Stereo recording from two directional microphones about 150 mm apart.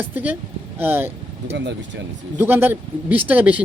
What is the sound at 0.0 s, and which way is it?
Speech, 10° right (ahead or behind).